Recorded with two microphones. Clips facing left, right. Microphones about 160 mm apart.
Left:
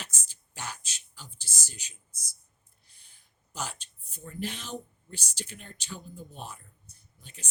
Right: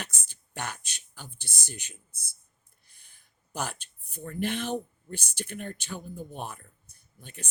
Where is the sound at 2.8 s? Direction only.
55° right (ahead or behind).